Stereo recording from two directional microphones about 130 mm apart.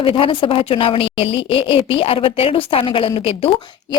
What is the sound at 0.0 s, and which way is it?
A woman's voice, 45° left (ahead or behind).